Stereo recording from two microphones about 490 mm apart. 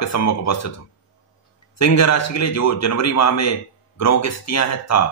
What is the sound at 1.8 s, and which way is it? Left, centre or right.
Speech, left.